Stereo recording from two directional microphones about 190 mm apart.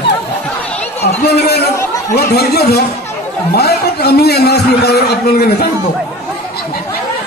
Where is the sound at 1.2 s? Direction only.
55° left (ahead or behind).